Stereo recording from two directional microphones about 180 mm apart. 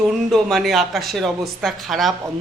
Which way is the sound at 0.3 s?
Centre (ahead or behind).